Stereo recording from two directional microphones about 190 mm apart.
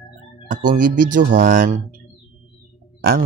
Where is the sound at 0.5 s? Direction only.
45° right (ahead or behind).